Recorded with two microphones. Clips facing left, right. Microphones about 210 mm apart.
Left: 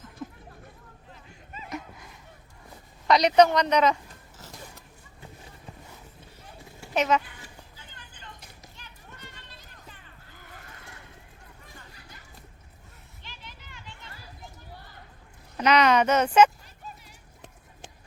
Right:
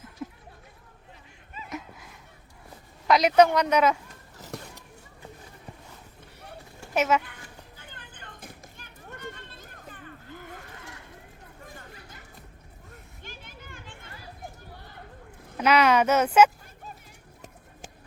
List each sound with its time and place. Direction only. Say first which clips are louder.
0.2 s a sound: right 1 dB; 10° right (ahead or behind)
3.1 s a woman's voice: even; 5° right (ahead or behind)
6.9 s a child's voice: even; 5° right (ahead or behind)
7.8 s children playing: right 3 dB; 55° right (ahead or behind)
13.2 s a sound: right 3 dB; 50° right (ahead or behind)
15.5 s speech: even; 10° right (ahead or behind)